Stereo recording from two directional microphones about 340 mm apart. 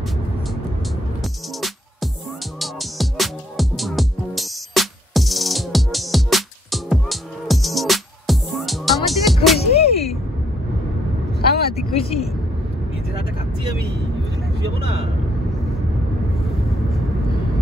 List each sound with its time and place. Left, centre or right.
1.2 s music: centre
9.6 s music: centre
11.3 s vehicle: centre